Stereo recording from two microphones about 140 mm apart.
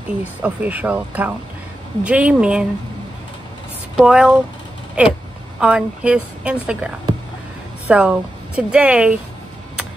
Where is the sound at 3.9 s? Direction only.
5° right (ahead or behind).